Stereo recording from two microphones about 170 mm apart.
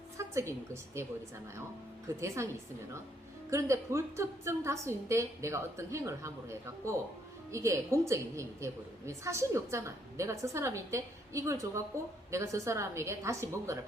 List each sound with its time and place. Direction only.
0.2 s a woman's voice: 15° right (ahead or behind)
2.2 s a woman's voice: 15° right (ahead or behind)
3.5 s a woman's voice: 15° right (ahead or behind)